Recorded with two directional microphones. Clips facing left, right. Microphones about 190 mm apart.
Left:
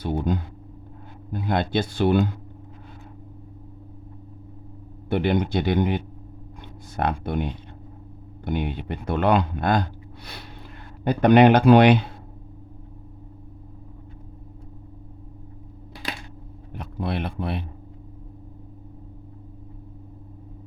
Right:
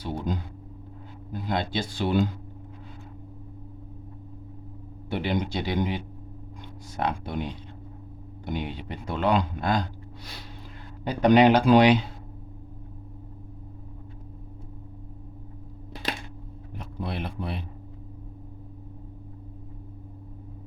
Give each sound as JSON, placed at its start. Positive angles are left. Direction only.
{"t": 0.0, "sound": "speech", "side_deg": 55}
{"t": 5.0, "sound": "speech", "side_deg": 55}
{"t": 11.0, "sound": "speech", "side_deg": 55}
{"t": 16.7, "sound": "speech", "side_deg": 60}